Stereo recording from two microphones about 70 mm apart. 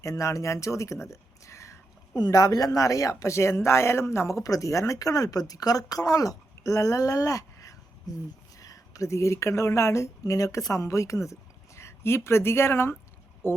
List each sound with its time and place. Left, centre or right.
0.0 s speech: left
2.1 s speech: left
4.4 s speech: left
8.1 s speech: left
8.5 s a woman's voice: left